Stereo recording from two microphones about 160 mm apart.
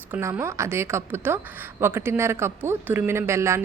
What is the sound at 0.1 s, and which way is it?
A woman's voice, 15° right (ahead or behind).